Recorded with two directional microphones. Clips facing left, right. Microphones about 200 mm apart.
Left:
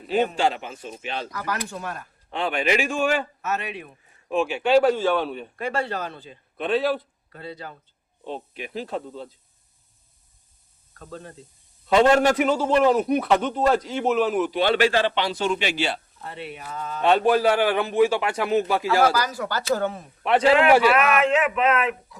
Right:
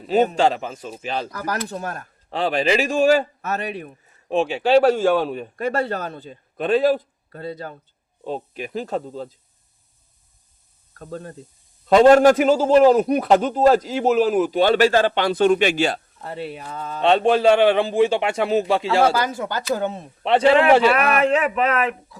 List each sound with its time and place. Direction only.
0.1 s a man's voice: 40° right (ahead or behind)
4.9 s a man's voice: 45° right (ahead or behind)
10.9 s a man's voice: 45° right (ahead or behind)